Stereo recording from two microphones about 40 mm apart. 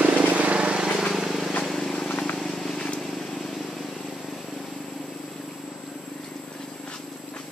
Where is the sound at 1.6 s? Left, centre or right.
Centre.